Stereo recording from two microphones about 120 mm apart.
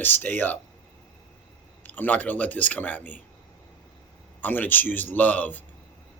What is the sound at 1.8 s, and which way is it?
Speech, 15° left (ahead or behind).